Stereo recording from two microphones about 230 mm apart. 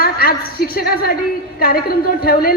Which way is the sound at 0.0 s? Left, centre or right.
Left.